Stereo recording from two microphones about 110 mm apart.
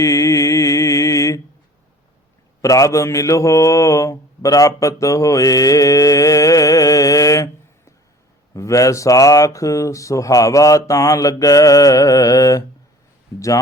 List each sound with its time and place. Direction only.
0.0 s mantra: 30° left (ahead or behind)
2.6 s mantra: 30° left (ahead or behind)
8.5 s speech: 30° left (ahead or behind)